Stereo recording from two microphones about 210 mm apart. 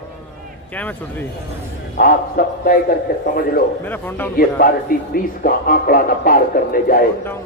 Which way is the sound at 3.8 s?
10° left (ahead or behind).